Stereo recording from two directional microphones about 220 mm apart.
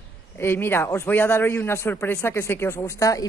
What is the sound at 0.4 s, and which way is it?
A man's voice, 10° left (ahead or behind).